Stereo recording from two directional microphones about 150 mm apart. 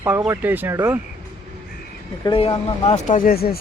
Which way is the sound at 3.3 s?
90° left.